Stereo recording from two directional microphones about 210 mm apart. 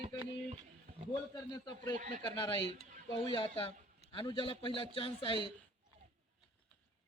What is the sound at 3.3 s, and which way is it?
Speech, 25° left (ahead or behind).